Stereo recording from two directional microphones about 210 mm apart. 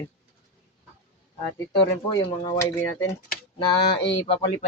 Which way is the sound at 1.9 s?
20° left (ahead or behind).